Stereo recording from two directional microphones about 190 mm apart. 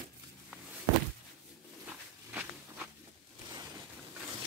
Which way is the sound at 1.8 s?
10° right (ahead or behind).